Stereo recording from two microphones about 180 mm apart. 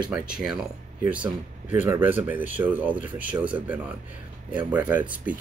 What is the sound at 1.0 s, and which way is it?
Speech, 5° right (ahead or behind).